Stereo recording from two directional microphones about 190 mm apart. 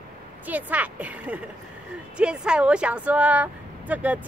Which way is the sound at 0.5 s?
10° right (ahead or behind).